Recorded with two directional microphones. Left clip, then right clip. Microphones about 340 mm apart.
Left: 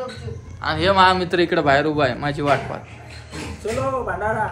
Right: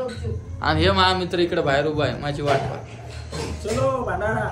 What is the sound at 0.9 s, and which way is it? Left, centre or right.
A man's voice, centre.